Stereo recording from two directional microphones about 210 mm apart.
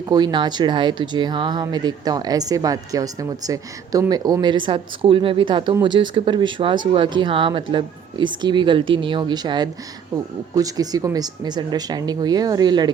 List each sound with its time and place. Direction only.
0.0 s speech: 20° right (ahead or behind)